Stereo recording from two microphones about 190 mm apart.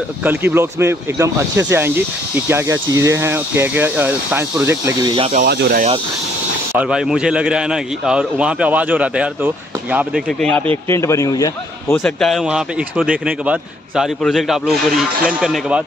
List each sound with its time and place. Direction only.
0.2 s speech: 10° right (ahead or behind)
5.3 s speech: 55° right (ahead or behind)
6.7 s speech: 5° right (ahead or behind)
10.2 s speech: 5° left (ahead or behind)
11.9 s speech: centre (ahead or behind)